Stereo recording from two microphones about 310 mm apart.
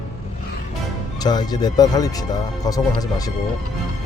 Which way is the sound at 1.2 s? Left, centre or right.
Centre.